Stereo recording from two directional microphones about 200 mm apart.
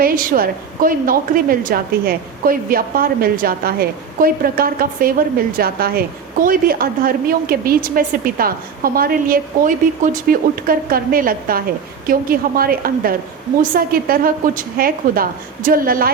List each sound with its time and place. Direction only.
0.0 s a woman's voice: 45° right (ahead or behind)